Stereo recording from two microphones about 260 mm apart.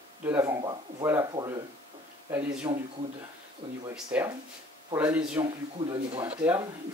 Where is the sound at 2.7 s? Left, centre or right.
Centre.